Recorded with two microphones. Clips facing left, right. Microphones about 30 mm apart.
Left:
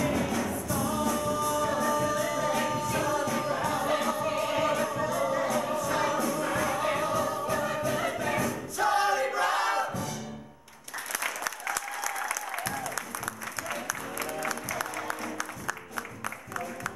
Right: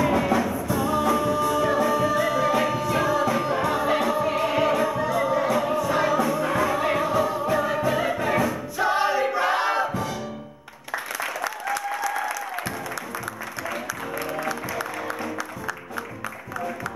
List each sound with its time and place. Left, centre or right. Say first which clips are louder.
0.0 s music: right 7 dB; right
11.1 s applause: right 1 dB; centre
13.2 s music: right 4 dB; centre